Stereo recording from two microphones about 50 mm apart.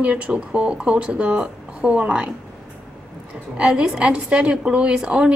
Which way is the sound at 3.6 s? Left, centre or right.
Centre.